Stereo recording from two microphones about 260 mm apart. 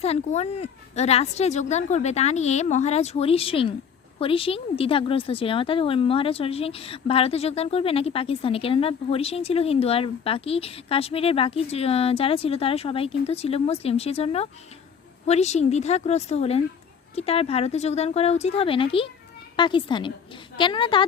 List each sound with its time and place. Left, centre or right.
0.0 s a woman's voice: left